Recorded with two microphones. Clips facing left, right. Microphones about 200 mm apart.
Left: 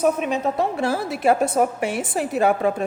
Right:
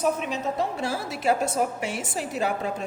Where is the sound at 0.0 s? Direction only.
55° left (ahead or behind).